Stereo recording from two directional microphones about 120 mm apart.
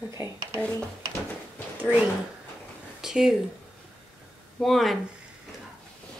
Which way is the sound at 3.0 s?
5° right (ahead or behind).